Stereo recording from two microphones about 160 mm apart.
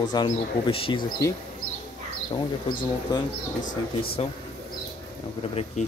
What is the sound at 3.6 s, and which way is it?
Speech, 55° left (ahead or behind).